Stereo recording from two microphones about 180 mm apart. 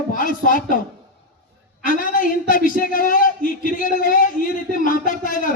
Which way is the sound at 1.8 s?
50° left (ahead or behind).